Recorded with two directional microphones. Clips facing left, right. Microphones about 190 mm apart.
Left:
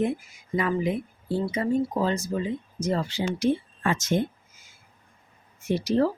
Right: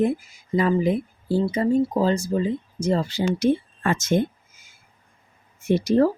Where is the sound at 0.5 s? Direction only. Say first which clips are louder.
Right 5 dB; 35° right (ahead or behind).